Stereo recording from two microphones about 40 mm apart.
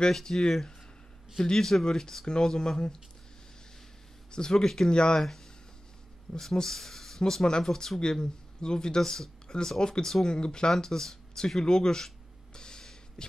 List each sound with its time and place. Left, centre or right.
0.1 s speech: centre
4.3 s speech: centre
6.3 s speech: centre
12.5 s a sound: centre